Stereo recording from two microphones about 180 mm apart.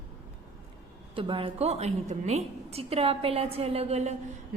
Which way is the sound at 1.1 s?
30° right (ahead or behind).